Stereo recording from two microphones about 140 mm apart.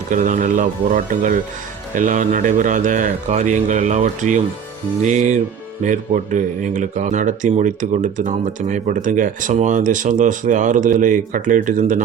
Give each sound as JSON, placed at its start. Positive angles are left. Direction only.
{"t": 0.1, "sound": "speech", "side_deg": -70}